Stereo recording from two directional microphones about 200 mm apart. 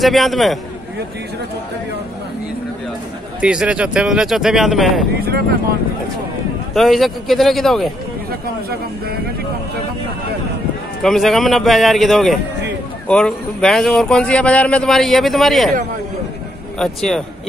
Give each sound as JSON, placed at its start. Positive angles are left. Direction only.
{"t": 0.0, "sound": "speech", "side_deg": 0}
{"t": 3.3, "sound": "speech", "side_deg": -5}
{"t": 6.7, "sound": "speech", "side_deg": 0}
{"t": 8.3, "sound": "speech", "side_deg": -50}
{"t": 11.0, "sound": "speech", "side_deg": 0}
{"t": 16.7, "sound": "speech", "side_deg": 0}